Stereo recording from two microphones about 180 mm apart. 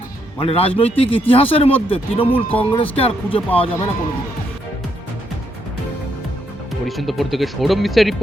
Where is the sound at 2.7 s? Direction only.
30° left (ahead or behind).